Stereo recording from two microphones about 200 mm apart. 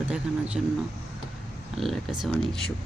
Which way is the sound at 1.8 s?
Centre (ahead or behind).